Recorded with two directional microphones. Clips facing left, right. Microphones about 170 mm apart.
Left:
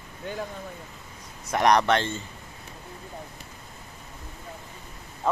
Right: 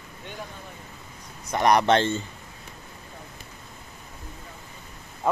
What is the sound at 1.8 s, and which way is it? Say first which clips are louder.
Speech: right 3 dB; 30° right (ahead or behind).